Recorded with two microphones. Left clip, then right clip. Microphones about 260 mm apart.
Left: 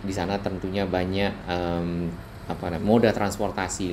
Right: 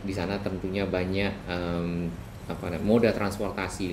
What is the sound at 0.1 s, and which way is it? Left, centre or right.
Speech, left.